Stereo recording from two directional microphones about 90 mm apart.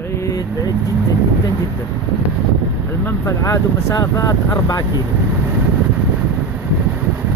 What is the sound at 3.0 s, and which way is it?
Vehicle, 35° left (ahead or behind).